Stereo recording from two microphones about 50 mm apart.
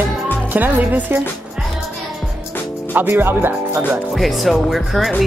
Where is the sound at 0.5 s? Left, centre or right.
Right.